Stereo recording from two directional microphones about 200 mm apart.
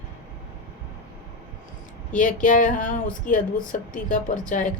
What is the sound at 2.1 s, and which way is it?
Speech, 40° left (ahead or behind).